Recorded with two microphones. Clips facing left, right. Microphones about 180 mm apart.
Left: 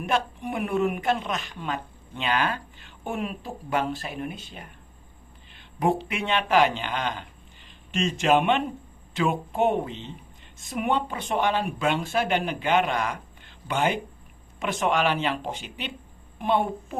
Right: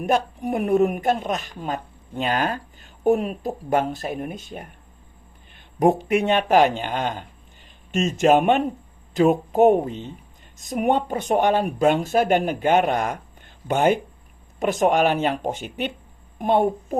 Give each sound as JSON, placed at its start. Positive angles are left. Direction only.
{"t": 0.0, "sound": "speech", "side_deg": -40}